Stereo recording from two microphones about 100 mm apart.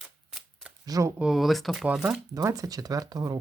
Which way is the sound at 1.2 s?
5° right (ahead or behind).